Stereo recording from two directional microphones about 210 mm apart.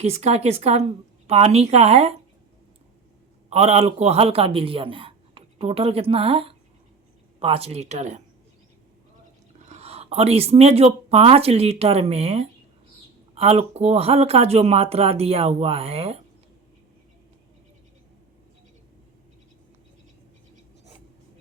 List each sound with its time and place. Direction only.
0.0 s a woman's voice: 30° right (ahead or behind)
3.5 s a woman's voice: 30° right (ahead or behind)
9.6 s speech: 30° right (ahead or behind)